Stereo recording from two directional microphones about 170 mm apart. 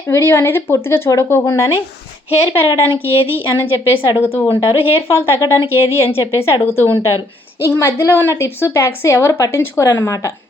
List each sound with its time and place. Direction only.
0.1 s a woman's voice: 15° left (ahead or behind)
2.4 s speech: 30° left (ahead or behind)
3.0 s speech: 15° right (ahead or behind)
4.2 s a woman's voice: 10° left (ahead or behind)
4.5 s speech: 35° left (ahead or behind)
5.1 s a woman's voice: 15° left (ahead or behind)